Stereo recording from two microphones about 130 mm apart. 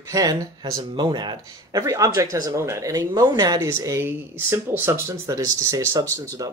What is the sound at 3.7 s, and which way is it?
Speech, 20° right (ahead or behind).